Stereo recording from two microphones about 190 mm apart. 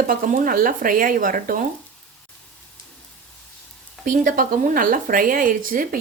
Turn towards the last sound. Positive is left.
turn(degrees=-45)  # may be behind; listen again after turning